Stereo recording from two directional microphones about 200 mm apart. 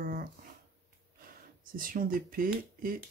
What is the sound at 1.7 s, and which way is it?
Speech, 45° right (ahead or behind).